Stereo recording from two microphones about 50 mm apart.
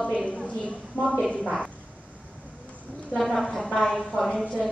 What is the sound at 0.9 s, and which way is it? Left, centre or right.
Speech, left.